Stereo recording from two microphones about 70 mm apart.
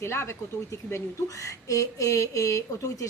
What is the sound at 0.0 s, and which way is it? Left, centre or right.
A woman's voice, left.